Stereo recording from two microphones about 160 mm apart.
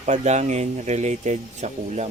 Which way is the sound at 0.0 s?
45° right (ahead or behind).